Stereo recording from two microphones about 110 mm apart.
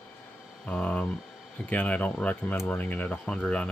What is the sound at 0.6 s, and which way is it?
Speech, 15° left (ahead or behind).